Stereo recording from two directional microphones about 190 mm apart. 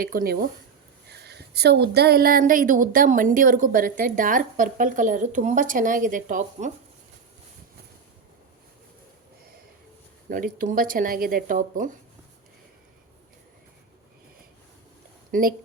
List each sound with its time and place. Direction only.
0.0 s a woman's voice: 50° right (ahead or behind)
1.2 s a woman's voice: 60° right (ahead or behind); by 6.7 s 45° right (ahead or behind)
10.2 s a woman's voice: 45° right (ahead or behind)
15.3 s speech: 50° right (ahead or behind)